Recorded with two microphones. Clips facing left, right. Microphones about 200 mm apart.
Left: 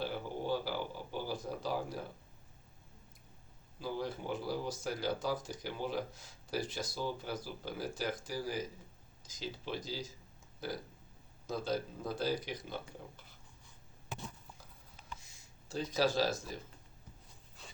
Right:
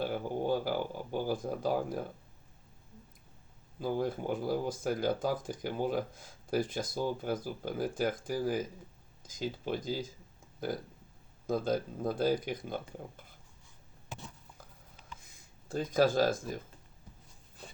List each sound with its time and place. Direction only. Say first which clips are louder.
0.0 s a sound: right 5 dB; 50° right (ahead or behind)
3.8 s speech: right 6 dB; 50° right (ahead or behind)
15.2 s speech: right 2 dB; 50° right (ahead or behind)